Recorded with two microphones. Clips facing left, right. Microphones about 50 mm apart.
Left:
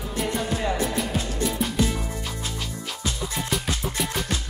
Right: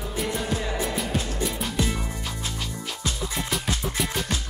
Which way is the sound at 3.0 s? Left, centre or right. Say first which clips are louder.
Left 1 dB; centre.